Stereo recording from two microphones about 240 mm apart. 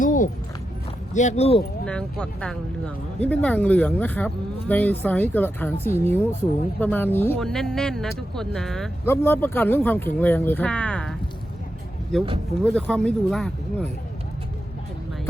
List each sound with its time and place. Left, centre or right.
0.0 s walk: left
1.1 s speech: left
1.8 s speech: centre
12.1 s speech: centre